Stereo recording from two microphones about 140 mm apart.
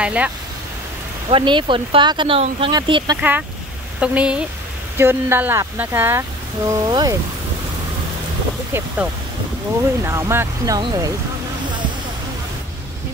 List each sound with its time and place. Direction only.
0.0 s speech: 10° right (ahead or behind)
1.3 s speech: 35° right (ahead or behind)
2.7 s speech: 30° right (ahead or behind)
3.2 s speech: 10° right (ahead or behind); by 7.2 s 25° right (ahead or behind)
8.7 s speech: 10° right (ahead or behind)
10.8 s speech: 35° right (ahead or behind)